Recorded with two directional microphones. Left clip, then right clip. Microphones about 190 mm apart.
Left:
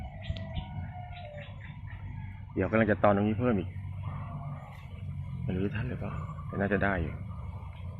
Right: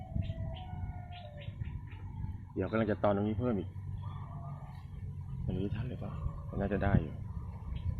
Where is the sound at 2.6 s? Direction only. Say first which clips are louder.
Left 6 dB; 10° left (ahead or behind).